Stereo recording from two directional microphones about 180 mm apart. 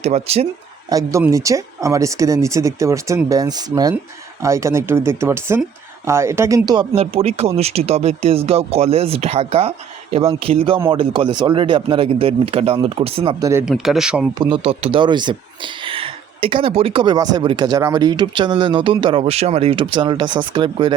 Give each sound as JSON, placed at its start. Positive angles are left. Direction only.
{"t": 0.0, "sound": "speech", "side_deg": -35}
{"t": 0.9, "sound": "speech", "side_deg": -20}
{"t": 13.4, "sound": "speech", "side_deg": -15}
{"t": 13.7, "sound": "speech", "side_deg": 0}
{"t": 14.3, "sound": "speech", "side_deg": -30}